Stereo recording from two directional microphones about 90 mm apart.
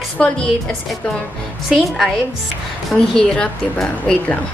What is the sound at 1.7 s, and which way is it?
A woman's voice, centre (ahead or behind).